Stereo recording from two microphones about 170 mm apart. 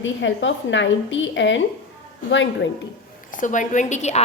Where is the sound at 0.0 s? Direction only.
90° left.